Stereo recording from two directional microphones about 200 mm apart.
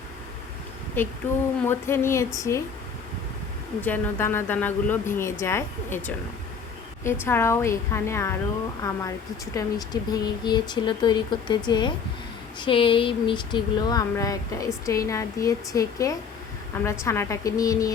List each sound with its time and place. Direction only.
1.6 s speech: 10° left (ahead or behind)
3.8 s speech: 10° left (ahead or behind)
7.3 s speech: 10° left (ahead or behind)